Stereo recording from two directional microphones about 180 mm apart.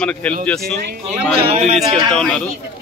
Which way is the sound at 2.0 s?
5° left (ahead or behind).